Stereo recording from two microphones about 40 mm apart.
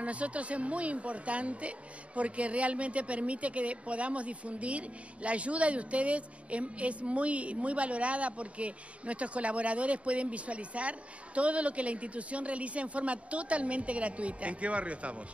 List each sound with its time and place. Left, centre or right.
0.0 s speech: right